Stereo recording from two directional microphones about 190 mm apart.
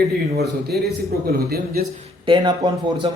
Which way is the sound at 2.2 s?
25° right (ahead or behind).